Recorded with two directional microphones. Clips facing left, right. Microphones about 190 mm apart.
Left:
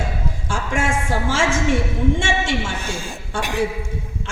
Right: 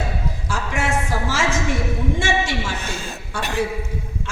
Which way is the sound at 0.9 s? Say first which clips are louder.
Left 1 dB; 25° left (ahead or behind).